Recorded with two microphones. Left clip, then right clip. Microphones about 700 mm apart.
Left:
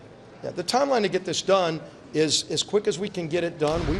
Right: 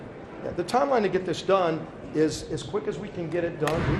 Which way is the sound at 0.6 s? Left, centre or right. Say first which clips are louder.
Left 1 dB; left.